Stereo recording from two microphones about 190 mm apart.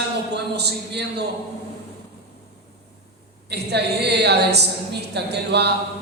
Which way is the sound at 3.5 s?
60° right (ahead or behind).